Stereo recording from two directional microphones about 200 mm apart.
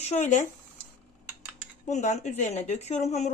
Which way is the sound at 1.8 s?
35° left (ahead or behind).